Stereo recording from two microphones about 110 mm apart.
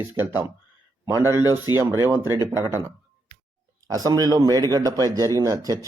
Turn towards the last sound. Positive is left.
turn(degrees=-30)  # may be behind; listen again after turning